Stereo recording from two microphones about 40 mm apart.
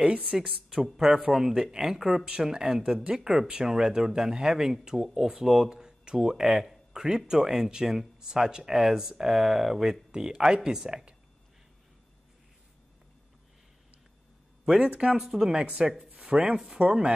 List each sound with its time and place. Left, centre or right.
0.0 s speech: right
0.4 s speech: centre
10.1 s speech: centre
14.6 s a sound: centre
14.9 s speech: right
15.6 s speech: right